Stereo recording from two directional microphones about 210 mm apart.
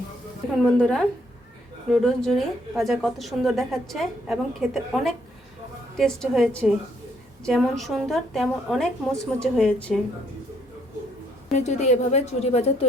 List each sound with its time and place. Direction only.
0.6 s a woman's voice: 5° left (ahead or behind)
11.5 s a woman's voice: 35° left (ahead or behind)